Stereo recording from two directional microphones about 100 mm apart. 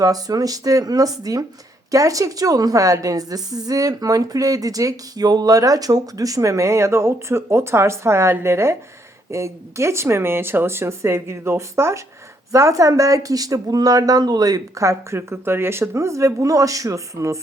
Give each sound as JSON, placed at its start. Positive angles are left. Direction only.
{"t": 0.0, "sound": "a woman's voice", "side_deg": -40}